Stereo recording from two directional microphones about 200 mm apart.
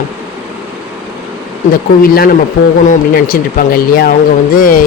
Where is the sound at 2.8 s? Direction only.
40° left (ahead or behind).